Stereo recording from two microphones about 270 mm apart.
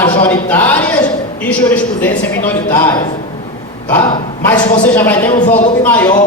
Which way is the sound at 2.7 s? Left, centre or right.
Centre.